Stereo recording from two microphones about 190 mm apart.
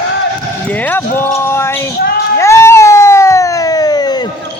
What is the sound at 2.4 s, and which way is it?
Cat, 15° left (ahead or behind).